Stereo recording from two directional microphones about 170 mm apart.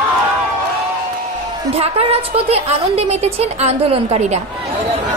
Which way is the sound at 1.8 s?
35° right (ahead or behind).